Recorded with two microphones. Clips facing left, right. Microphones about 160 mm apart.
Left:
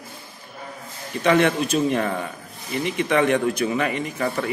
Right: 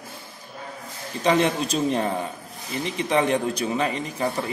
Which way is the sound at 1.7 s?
30° right (ahead or behind).